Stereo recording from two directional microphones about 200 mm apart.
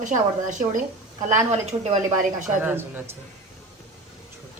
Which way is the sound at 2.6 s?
10° right (ahead or behind).